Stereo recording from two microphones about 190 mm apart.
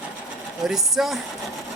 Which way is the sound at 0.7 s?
Centre (ahead or behind).